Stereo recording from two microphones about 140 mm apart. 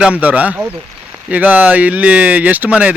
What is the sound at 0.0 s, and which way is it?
Speech, 10° right (ahead or behind).